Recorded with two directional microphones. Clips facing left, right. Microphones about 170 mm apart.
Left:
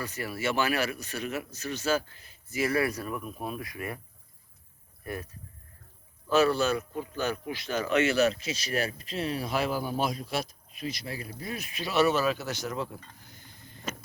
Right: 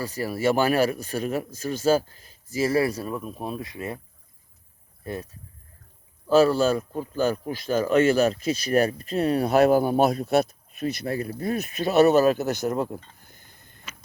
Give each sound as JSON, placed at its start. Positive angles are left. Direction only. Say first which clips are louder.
{"t": 0.0, "sound": "speech", "louder": "right 7 dB", "side_deg": -35}
{"t": 5.0, "sound": "speech", "louder": "right 4 dB", "side_deg": -25}